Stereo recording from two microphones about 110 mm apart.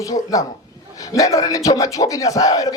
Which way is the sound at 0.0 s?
30° left (ahead or behind).